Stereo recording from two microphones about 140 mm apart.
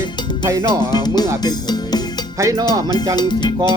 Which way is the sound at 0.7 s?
30° left (ahead or behind).